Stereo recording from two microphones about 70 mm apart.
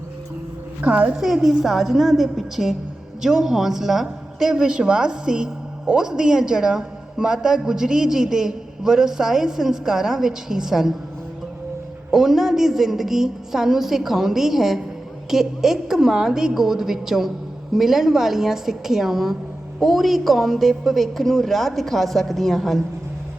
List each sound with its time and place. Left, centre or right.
0.8 s a woman's voice: centre
1.1 s a woman's voice: centre
12.1 s a woman's voice: centre